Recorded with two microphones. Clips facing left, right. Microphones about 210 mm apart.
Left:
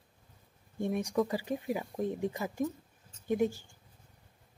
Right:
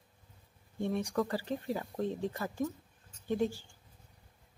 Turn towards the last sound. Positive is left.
turn(degrees=15)  # may be behind; listen again after turning